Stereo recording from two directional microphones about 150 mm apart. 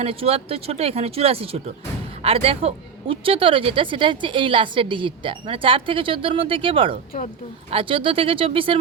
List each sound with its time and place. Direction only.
0.0 s a woman's voice: 40° right (ahead or behind)